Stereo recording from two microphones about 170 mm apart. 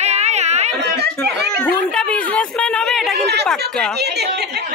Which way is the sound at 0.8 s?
70° right (ahead or behind).